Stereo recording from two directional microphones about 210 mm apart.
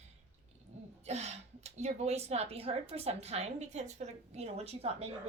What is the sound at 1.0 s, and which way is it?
Speech, 30° right (ahead or behind).